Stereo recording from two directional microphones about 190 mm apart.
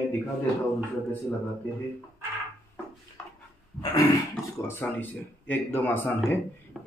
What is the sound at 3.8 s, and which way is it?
Speech, 20° left (ahead or behind).